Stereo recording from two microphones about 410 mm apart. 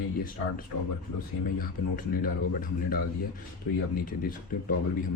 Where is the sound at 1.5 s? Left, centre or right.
Left.